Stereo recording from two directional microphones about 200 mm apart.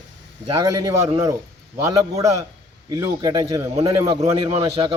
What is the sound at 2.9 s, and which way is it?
A man's voice, 20° right (ahead or behind).